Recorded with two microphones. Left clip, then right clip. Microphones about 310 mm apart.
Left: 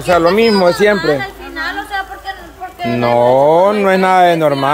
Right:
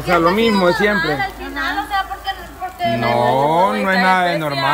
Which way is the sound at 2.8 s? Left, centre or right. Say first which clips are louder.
Left 4 dB; left.